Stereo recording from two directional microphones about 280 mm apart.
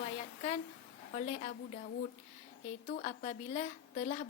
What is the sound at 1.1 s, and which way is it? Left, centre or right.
Speech, left.